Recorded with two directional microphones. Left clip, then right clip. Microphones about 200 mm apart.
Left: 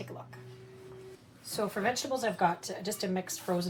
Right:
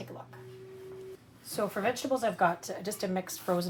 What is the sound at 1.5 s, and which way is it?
Speech, 40° right (ahead or behind).